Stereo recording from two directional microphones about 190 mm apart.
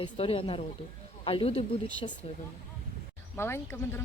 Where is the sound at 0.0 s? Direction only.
30° left (ahead or behind).